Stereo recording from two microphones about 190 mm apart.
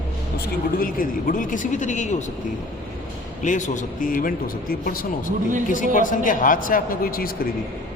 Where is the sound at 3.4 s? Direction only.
40° left (ahead or behind).